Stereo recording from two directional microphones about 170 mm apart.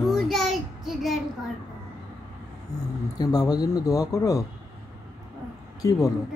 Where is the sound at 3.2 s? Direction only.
20° left (ahead or behind).